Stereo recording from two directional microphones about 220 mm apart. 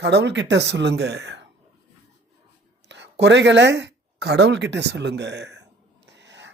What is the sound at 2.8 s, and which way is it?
A woman's voice, 55° right (ahead or behind).